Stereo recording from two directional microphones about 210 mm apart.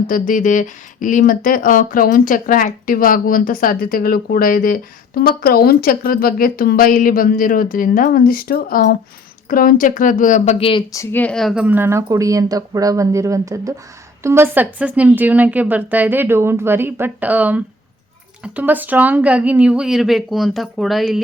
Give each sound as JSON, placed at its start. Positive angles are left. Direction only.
{"t": 0.1, "sound": "speech", "side_deg": 40}